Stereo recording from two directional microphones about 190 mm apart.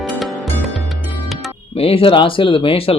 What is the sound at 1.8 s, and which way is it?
Speech, 30° left (ahead or behind).